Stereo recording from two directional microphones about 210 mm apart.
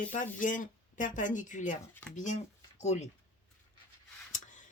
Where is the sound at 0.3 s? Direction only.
40° left (ahead or behind).